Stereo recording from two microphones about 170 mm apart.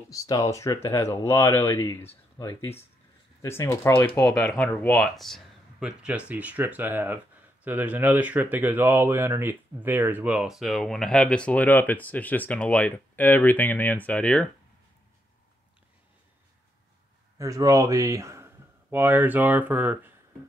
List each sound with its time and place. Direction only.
0.1 s speech: 20° left (ahead or behind)
17.4 s speech: 20° right (ahead or behind)